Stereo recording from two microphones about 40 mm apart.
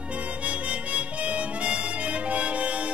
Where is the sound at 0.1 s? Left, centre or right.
Right.